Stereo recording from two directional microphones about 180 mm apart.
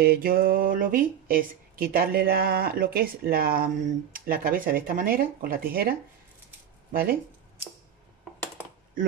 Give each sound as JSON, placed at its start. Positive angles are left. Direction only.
{"t": 0.0, "sound": "speech", "side_deg": -55}